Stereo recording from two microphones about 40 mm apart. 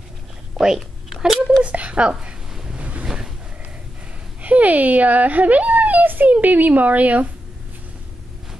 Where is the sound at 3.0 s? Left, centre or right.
Centre.